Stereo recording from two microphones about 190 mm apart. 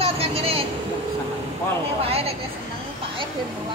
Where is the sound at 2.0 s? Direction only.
30° right (ahead or behind).